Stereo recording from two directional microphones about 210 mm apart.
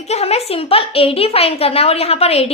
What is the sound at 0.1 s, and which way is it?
A woman's voice, 30° left (ahead or behind).